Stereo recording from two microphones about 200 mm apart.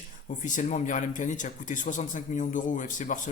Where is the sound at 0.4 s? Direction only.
40° left (ahead or behind).